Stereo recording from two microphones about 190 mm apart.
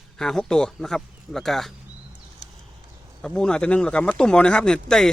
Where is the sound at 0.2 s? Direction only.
5° left (ahead or behind).